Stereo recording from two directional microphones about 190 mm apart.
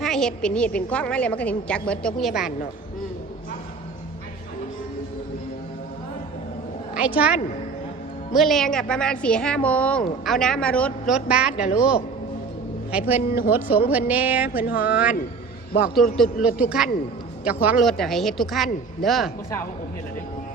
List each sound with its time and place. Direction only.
0.0 s speech: centre (ahead or behind)
6.9 s a woman's voice: 5° right (ahead or behind)
12.9 s a woman's voice: 10° right (ahead or behind)
14.6 s speech: 50° left (ahead or behind)
14.8 s a woman's voice: 5° right (ahead or behind)